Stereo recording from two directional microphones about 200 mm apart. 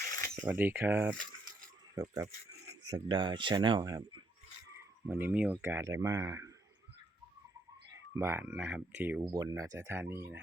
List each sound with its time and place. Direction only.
0.3 s speech: 10° right (ahead or behind)
8.1 s speech: 10° right (ahead or behind)